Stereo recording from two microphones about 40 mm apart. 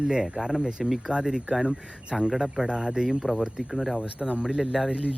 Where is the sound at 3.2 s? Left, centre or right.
Centre.